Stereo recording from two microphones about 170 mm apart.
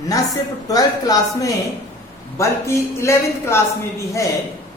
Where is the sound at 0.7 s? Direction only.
20° left (ahead or behind).